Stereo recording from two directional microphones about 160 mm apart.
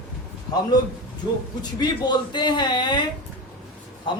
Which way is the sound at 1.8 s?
25° left (ahead or behind).